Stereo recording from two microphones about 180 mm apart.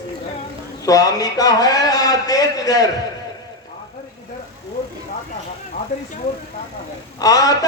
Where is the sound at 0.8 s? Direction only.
20° left (ahead or behind).